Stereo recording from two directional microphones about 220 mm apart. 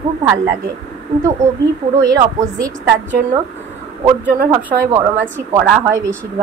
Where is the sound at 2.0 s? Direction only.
15° right (ahead or behind).